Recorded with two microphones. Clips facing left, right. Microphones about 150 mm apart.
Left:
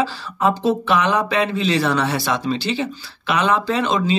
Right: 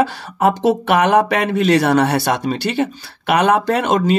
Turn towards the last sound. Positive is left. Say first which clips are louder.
# right 3 dB
turn(degrees=-65)  # may be behind; listen again after turning